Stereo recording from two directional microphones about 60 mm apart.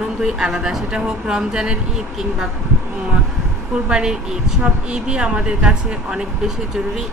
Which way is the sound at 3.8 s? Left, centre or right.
Centre.